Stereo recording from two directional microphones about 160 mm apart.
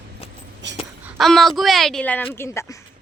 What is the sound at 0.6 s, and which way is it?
Speech, 90° right.